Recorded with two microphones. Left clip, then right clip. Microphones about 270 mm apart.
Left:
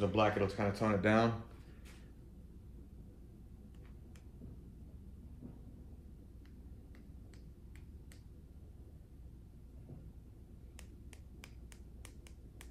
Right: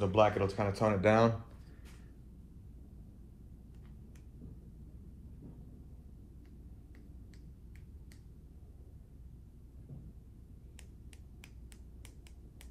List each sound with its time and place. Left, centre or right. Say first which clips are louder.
0.0 s speech: right 4 dB; right